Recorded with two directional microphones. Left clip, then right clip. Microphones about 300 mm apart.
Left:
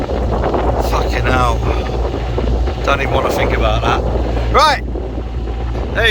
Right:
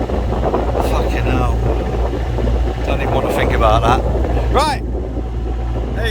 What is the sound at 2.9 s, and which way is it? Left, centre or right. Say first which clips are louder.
Speech: left 3 dB; centre.